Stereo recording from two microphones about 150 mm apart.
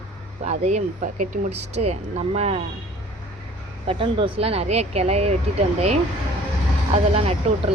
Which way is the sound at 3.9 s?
35° right (ahead or behind).